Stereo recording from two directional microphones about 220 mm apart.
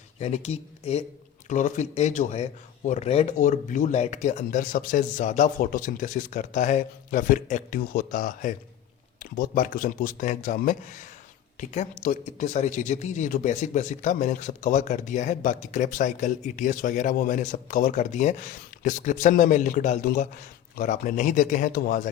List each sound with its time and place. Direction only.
0.2 s speech: 30° left (ahead or behind)